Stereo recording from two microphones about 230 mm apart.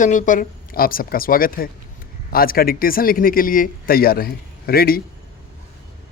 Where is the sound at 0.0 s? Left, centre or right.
Left.